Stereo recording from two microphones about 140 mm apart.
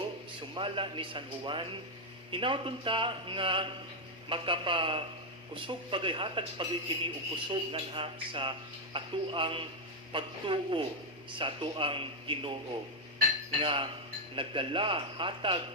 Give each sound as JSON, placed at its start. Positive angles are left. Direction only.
{"t": 0.5, "sound": "speech", "side_deg": -40}
{"t": 13.6, "sound": "speech", "side_deg": -40}